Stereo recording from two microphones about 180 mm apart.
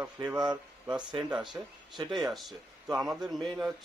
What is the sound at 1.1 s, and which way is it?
A man's voice, centre (ahead or behind).